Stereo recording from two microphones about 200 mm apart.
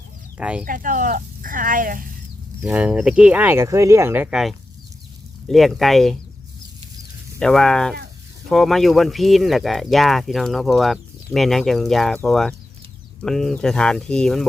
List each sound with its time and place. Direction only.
0.3 s speech: 5° right (ahead or behind)
0.6 s speech: 40° right (ahead or behind)
2.6 s speech: 5° right (ahead or behind)
7.3 s speech: 5° left (ahead or behind)